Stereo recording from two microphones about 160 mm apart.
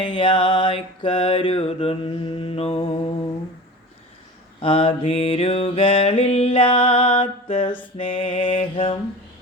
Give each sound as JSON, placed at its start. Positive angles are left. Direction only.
{"t": 0.0, "sound": "mantra", "side_deg": 30}
{"t": 4.6, "sound": "mantra", "side_deg": 35}